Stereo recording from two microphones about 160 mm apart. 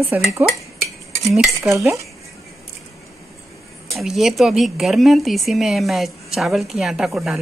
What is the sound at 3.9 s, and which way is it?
A woman's voice, centre (ahead or behind).